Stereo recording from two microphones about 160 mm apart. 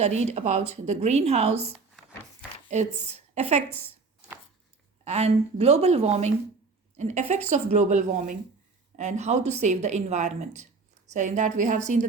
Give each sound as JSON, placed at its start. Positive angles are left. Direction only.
{"t": 0.0, "sound": "a woman's voice", "side_deg": -45}
{"t": 5.0, "sound": "a woman's voice", "side_deg": -45}